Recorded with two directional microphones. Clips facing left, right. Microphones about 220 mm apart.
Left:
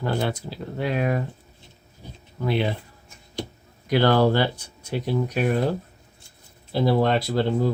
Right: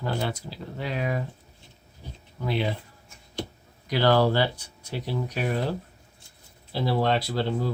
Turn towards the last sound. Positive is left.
turn(degrees=50)  # may be behind; listen again after turning